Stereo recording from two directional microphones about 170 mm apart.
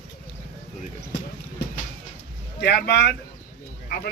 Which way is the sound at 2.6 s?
80° left.